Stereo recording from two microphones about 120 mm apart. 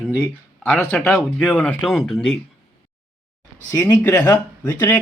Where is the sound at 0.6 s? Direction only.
15° left (ahead or behind).